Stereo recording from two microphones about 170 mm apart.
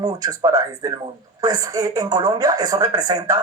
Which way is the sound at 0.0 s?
20° right (ahead or behind).